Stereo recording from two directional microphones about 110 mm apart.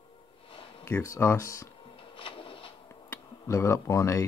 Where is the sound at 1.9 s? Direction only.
55° left (ahead or behind).